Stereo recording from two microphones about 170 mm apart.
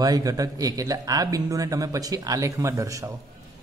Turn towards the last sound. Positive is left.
turn(degrees=-20)  # may be behind; listen again after turning